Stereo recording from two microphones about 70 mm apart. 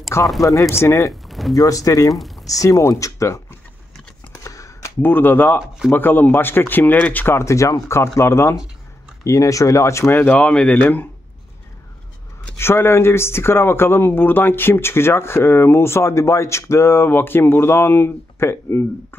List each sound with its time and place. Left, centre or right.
0.4 s speech: left
0.7 s speech: left
1.5 s speech: left
4.4 s a sound: left
5.0 s speech: left
7.2 s speech: left
9.2 s speech: left
10.1 s speech: left
10.8 s speech: left
12.5 s speech: left